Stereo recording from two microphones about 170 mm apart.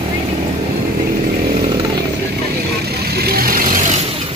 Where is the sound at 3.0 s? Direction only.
65° right (ahead or behind).